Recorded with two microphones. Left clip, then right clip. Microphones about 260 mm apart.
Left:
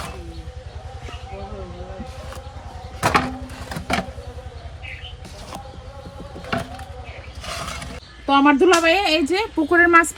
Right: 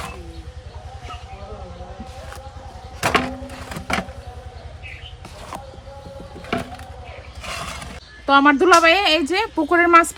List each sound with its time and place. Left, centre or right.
3.0 s a sound: centre
7.4 s mechanisms: centre
8.3 s speech: centre
9.0 s a woman's voice: right